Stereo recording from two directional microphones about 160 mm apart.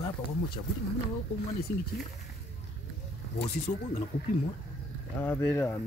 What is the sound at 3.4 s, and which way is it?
Speech, 45° left (ahead or behind).